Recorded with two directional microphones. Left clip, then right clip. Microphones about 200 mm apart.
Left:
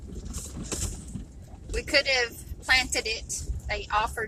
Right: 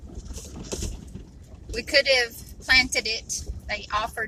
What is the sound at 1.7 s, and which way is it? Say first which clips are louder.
A woman's voice: right 4 dB; 25° right (ahead or behind).